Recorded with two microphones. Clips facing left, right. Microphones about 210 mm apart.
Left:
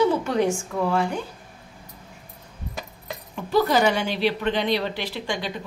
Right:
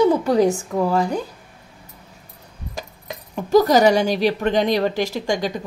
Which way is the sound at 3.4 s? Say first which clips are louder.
Right 6 dB; 40° right (ahead or behind).